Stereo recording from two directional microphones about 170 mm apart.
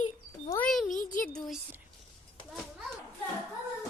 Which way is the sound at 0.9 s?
50° left (ahead or behind).